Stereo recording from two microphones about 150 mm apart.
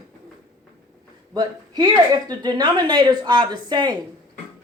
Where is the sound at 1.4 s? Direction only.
25° right (ahead or behind).